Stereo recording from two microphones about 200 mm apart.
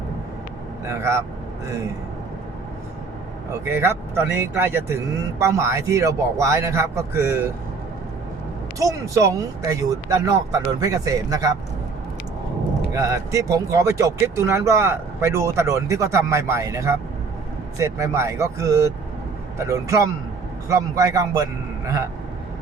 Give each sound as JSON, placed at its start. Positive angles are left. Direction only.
{"t": 0.9, "sound": "speech", "side_deg": -15}
{"t": 3.7, "sound": "speech", "side_deg": -10}
{"t": 8.8, "sound": "speech", "side_deg": -15}
{"t": 12.9, "sound": "speech", "side_deg": -15}